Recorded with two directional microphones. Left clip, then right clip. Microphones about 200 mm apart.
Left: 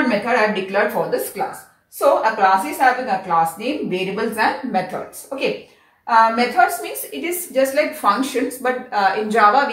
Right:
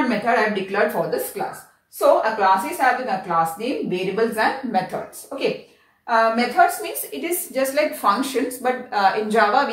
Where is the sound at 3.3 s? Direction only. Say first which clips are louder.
Left 2 dB; 15° right (ahead or behind).